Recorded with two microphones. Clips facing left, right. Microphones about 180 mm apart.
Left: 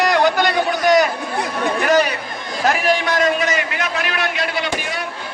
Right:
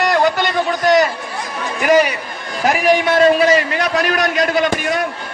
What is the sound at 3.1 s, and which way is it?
A man's voice, 30° right (ahead or behind).